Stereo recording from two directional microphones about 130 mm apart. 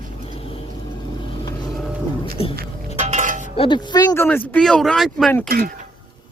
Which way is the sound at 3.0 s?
70° right (ahead or behind).